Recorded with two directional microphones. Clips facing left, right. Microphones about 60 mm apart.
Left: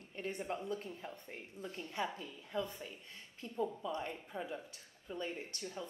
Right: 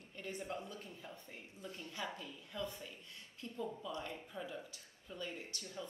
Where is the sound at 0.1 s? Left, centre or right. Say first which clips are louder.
Left 4 dB; left.